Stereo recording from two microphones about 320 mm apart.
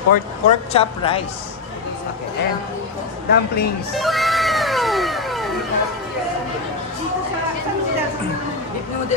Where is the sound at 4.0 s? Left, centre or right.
Centre.